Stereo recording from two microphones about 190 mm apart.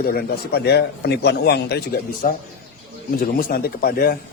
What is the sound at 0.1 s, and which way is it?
Speech, 55° left (ahead or behind).